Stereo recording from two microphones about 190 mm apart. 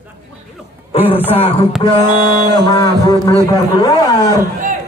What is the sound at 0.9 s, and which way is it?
Speech, 30° left (ahead or behind).